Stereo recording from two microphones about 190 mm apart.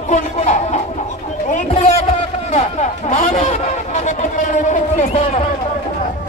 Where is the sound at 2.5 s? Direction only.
35° left (ahead or behind).